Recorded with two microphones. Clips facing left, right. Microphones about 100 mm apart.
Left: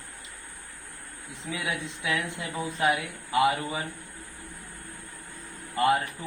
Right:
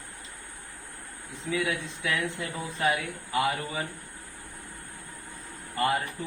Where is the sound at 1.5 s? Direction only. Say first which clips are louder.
Right 3 dB; 20° left (ahead or behind).